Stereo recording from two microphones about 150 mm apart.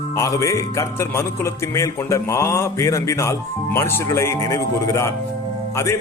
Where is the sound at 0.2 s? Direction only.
20° left (ahead or behind).